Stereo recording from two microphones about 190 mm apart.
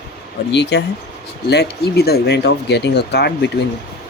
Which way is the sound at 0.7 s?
65° left (ahead or behind).